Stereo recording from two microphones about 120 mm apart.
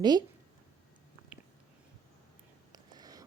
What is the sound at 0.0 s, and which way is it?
Speech, 35° right (ahead or behind).